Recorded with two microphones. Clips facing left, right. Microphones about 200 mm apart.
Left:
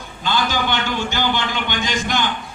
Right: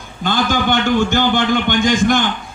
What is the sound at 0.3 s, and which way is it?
A man's voice, 50° right (ahead or behind).